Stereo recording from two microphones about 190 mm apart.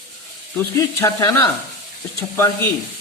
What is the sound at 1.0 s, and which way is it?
Speech, 15° left (ahead or behind).